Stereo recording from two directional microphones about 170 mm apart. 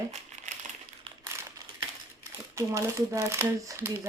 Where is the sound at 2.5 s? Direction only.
15° right (ahead or behind).